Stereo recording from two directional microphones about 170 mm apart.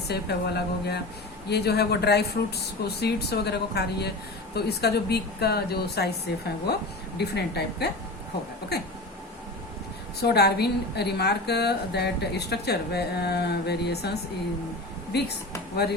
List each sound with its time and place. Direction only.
0.1 s a woman's voice: 75° left (ahead or behind)
10.2 s a woman's voice: 70° left (ahead or behind)